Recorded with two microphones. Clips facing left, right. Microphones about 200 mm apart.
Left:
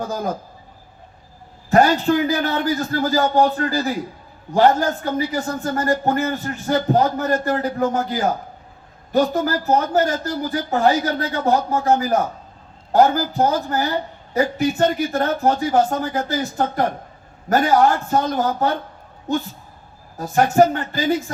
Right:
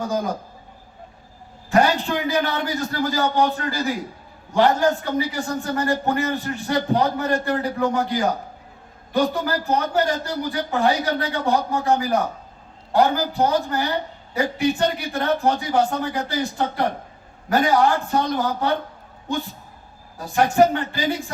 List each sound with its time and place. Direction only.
0.1 s speech: 40° left (ahead or behind)
1.7 s speech: 40° left (ahead or behind)
20.1 s speech: 40° left (ahead or behind)